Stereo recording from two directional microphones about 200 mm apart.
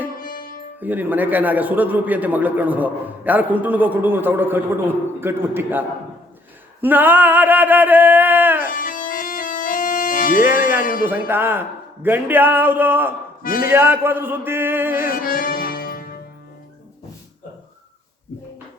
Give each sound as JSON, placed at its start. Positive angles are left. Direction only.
{"t": 0.2, "sound": "music", "side_deg": 45}
{"t": 0.8, "sound": "a man's voice", "side_deg": -10}
{"t": 6.8, "sound": "a man's voice", "side_deg": -10}
{"t": 8.7, "sound": "music", "side_deg": 45}
{"t": 10.6, "sound": "speech", "side_deg": 45}
{"t": 11.0, "sound": "a man's voice", "side_deg": -10}
{"t": 13.4, "sound": "speech", "side_deg": 45}
{"t": 13.7, "sound": "a man's voice", "side_deg": -10}
{"t": 15.1, "sound": "music", "side_deg": 45}